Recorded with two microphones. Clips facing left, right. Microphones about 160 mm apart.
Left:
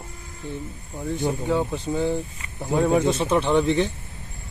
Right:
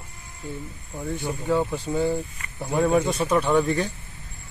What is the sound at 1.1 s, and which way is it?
Speech, 20° left (ahead or behind).